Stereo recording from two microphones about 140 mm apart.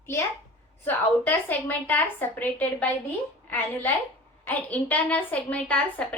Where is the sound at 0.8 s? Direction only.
10° left (ahead or behind).